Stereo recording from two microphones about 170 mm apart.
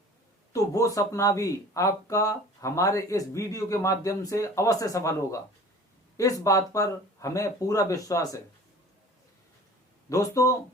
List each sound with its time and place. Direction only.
0.5 s speech: 20° left (ahead or behind)
10.1 s speech: 20° left (ahead or behind)